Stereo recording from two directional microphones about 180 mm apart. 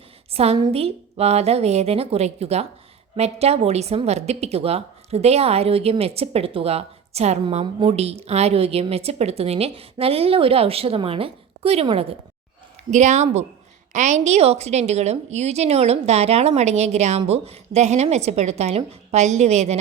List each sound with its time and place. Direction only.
0.3 s speech: 35° right (ahead or behind)